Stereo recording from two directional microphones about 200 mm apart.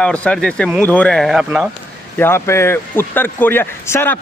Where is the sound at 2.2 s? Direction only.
10° left (ahead or behind).